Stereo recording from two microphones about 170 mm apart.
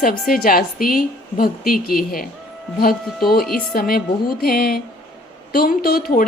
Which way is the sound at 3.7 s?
60° left (ahead or behind).